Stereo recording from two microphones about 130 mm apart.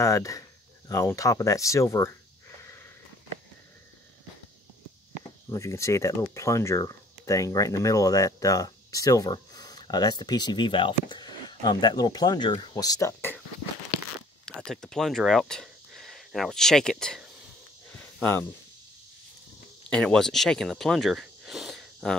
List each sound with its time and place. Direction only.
0.0 s speech: 25° left (ahead or behind)
5.5 s speech: 25° left (ahead or behind)
14.4 s speech: 5° left (ahead or behind)
19.9 s speech: 5° left (ahead or behind)